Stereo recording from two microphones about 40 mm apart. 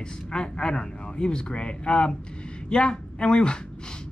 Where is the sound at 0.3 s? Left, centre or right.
Centre.